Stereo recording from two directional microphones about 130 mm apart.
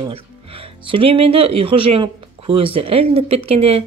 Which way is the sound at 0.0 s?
45° right (ahead or behind).